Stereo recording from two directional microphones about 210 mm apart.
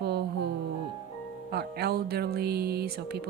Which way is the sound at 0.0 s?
50° right (ahead or behind).